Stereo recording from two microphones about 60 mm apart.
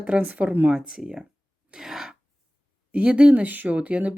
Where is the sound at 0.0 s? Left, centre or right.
Right.